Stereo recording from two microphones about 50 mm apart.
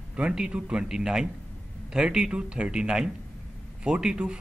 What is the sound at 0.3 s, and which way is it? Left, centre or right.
Speech, centre.